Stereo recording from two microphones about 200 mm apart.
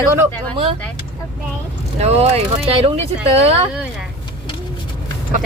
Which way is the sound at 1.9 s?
35° right (ahead or behind).